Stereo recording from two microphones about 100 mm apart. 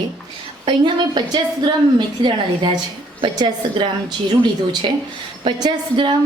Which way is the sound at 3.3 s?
50° right (ahead or behind).